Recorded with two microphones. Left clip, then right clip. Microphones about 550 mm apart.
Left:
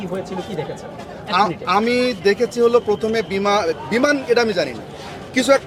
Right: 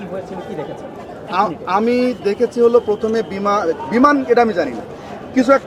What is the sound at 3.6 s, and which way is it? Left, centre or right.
Speech, left.